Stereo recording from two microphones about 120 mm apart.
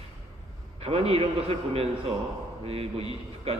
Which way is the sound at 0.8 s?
55° right (ahead or behind).